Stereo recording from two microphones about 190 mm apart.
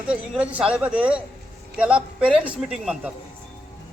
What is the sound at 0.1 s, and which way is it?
A man's voice, 5° right (ahead or behind).